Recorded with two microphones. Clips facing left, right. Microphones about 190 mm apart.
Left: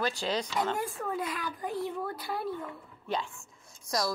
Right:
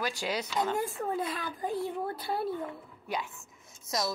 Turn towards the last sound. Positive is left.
turn(degrees=-25)  # may be behind; listen again after turning